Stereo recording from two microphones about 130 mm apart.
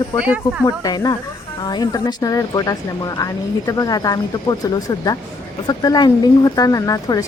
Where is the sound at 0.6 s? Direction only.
30° left (ahead or behind).